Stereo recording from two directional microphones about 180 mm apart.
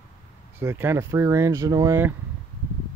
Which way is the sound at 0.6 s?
15° right (ahead or behind).